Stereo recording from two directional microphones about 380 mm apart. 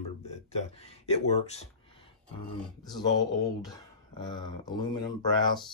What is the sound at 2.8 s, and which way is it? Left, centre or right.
Speech, centre.